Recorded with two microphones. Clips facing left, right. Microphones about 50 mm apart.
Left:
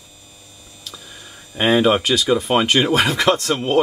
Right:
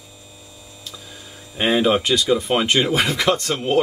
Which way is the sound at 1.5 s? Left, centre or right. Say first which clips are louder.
Left 2 dB; centre.